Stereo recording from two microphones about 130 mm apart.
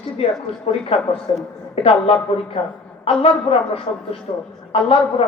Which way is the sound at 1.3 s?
50° left (ahead or behind).